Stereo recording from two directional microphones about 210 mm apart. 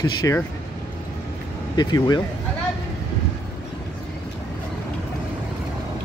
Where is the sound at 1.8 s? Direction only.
20° left (ahead or behind).